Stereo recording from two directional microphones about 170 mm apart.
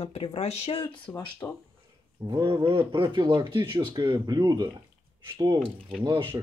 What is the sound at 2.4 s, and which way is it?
Speech, 30° right (ahead or behind).